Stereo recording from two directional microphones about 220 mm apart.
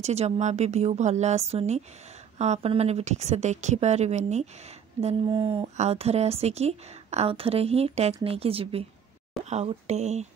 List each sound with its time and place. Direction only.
0.0 s a woman's voice: 30° right (ahead or behind)